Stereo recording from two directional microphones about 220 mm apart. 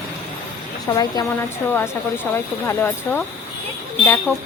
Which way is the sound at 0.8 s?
15° left (ahead or behind).